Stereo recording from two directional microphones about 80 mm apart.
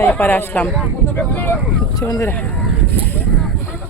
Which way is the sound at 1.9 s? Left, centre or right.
Left.